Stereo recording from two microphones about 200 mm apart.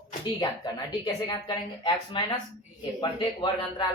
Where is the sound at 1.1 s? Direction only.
20° left (ahead or behind).